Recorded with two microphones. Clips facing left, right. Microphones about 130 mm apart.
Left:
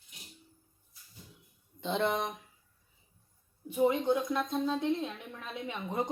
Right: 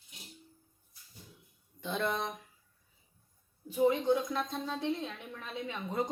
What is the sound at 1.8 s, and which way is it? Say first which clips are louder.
Speech: left 3 dB; 25° left (ahead or behind).